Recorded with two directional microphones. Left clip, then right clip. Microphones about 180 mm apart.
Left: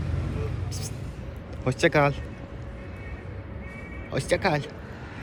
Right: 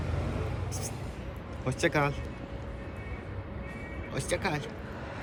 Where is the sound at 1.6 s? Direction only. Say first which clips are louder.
Left 7 dB; 10° right (ahead or behind).